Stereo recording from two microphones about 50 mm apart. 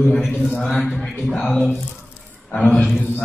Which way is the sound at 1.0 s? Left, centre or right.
Centre.